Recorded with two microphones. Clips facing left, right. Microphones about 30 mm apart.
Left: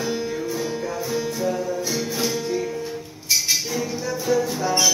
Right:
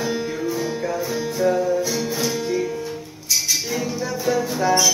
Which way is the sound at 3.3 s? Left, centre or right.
Centre.